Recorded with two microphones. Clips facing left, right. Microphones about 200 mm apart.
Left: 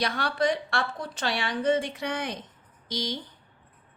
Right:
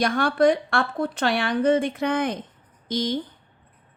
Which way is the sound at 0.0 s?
50° right (ahead or behind).